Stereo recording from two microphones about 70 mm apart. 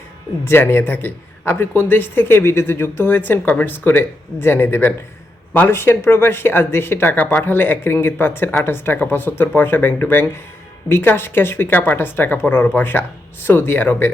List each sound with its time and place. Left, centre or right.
0.4 s speech: left
7.2 s speech: left